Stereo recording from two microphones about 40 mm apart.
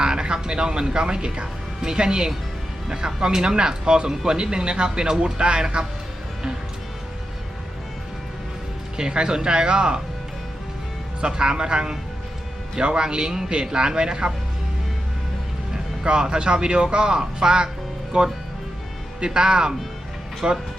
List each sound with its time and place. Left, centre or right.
0.0 s speech: centre
9.0 s speech: centre
11.2 s speech: right
15.7 s speech: centre
18.1 s speech: right